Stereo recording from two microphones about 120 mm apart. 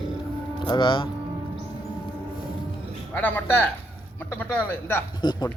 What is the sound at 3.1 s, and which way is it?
Speech, 15° left (ahead or behind).